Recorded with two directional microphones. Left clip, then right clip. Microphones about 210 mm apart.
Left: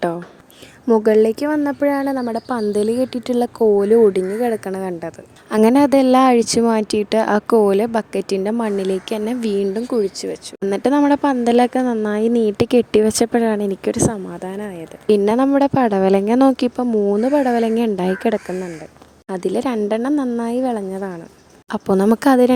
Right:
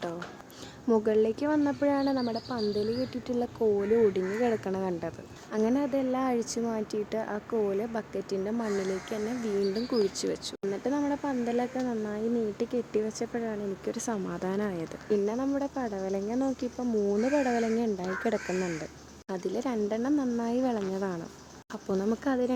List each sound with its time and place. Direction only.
0.9 s speech: 35° left (ahead or behind)
2.3 s speech: 45° left (ahead or behind)
4.4 s speech: 25° left (ahead or behind)
5.5 s a woman's voice: 50° left (ahead or behind)
10.2 s speech: 15° left (ahead or behind)
10.7 s speech: 45° left (ahead or behind)
13.9 s speech: 30° left (ahead or behind)
14.3 s speech: 10° left (ahead or behind)
15.1 s a woman's voice: 50° left (ahead or behind); by 21.2 s 20° left (ahead or behind)
21.7 s a woman's voice: 45° left (ahead or behind)